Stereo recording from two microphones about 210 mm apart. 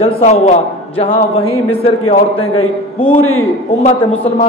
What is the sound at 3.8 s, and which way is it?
Speech, 30° left (ahead or behind).